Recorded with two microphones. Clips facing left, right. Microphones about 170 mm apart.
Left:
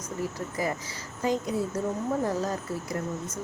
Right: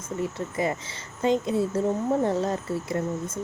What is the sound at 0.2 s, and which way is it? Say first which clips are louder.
Speech: right 3 dB; 25° right (ahead or behind).